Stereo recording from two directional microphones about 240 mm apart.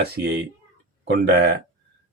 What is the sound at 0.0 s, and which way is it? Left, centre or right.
A man's voice, right.